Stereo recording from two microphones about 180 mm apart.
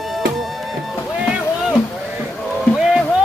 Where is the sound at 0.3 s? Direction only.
Centre (ahead or behind).